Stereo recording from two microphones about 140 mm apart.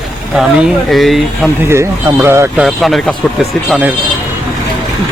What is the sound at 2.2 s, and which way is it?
Speech, 20° right (ahead or behind).